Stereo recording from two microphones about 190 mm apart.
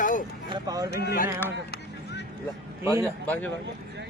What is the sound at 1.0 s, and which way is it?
Speech, 50° left (ahead or behind).